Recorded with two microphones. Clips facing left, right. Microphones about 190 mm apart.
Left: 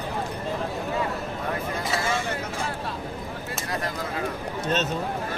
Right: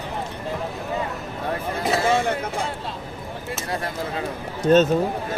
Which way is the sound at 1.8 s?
65° right (ahead or behind).